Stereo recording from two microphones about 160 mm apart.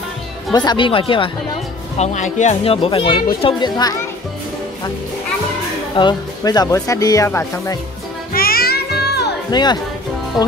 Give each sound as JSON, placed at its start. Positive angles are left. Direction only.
{"t": 0.5, "sound": "speech", "side_deg": 25}
{"t": 2.0, "sound": "speech", "side_deg": 50}
{"t": 5.9, "sound": "speech", "side_deg": 25}
{"t": 8.3, "sound": "music", "side_deg": 65}
{"t": 9.5, "sound": "speech", "side_deg": 25}